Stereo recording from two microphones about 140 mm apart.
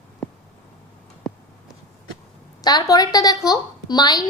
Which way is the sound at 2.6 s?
30° left (ahead or behind).